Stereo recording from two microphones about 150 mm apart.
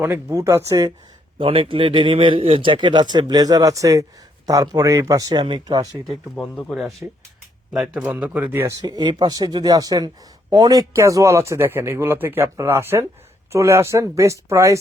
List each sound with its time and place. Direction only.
0.0 s speech: 15° right (ahead or behind)
1.4 s a man's voice: 35° right (ahead or behind)
6.3 s a man's voice: 10° left (ahead or behind); by 8.7 s 10° right (ahead or behind)
8.8 s a man's voice: 30° right (ahead or behind)